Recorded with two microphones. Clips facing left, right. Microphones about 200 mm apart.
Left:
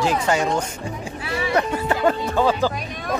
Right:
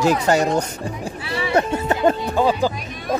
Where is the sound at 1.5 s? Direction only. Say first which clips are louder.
Right 3 dB; 25° right (ahead or behind).